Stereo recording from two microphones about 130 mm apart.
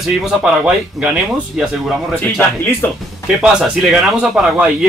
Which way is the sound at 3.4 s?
5° right (ahead or behind).